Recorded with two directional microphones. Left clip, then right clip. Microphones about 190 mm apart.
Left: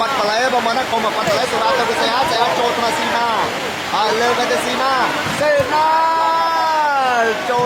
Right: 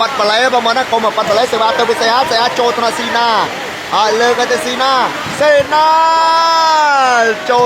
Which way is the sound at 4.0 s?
30° right (ahead or behind).